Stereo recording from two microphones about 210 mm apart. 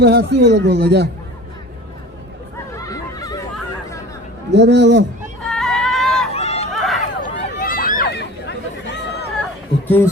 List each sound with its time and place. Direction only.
0.0 s speech: 50° right (ahead or behind)
2.7 s a sound: 15° left (ahead or behind)
4.5 s speech: 55° right (ahead or behind)
5.5 s a sound: centre (ahead or behind)
6.3 s chatter: 30° left (ahead or behind)
6.7 s run: centre (ahead or behind)
7.2 s run: 40° left (ahead or behind)
8.1 s chatter: 55° left (ahead or behind)
9.8 s a man's voice: 10° left (ahead or behind)